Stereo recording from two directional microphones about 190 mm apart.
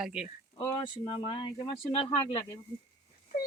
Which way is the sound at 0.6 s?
25° left (ahead or behind).